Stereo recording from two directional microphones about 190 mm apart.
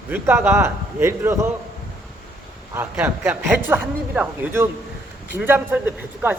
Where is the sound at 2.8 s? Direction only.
10° right (ahead or behind).